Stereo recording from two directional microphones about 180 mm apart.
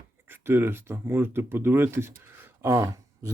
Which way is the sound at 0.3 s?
15° right (ahead or behind).